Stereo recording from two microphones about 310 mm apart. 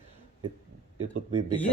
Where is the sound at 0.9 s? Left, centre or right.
Right.